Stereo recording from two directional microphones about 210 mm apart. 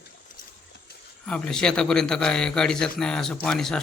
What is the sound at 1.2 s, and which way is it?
A man's voice, 5° left (ahead or behind).